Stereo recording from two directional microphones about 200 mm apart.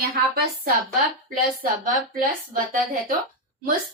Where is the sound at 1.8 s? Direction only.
45° right (ahead or behind).